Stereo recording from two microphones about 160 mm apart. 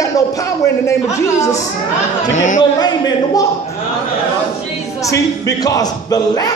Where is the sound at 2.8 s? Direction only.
25° left (ahead or behind).